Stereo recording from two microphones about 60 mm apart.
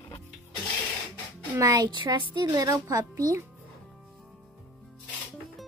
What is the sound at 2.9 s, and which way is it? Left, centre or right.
Speech, right.